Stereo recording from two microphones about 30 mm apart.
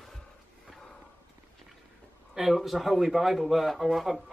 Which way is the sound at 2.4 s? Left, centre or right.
Centre.